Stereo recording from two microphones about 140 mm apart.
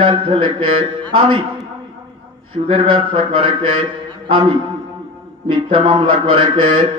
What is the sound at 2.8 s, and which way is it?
A man's voice, 40° right (ahead or behind).